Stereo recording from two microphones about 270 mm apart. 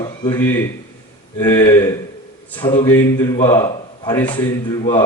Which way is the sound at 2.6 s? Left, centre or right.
Centre.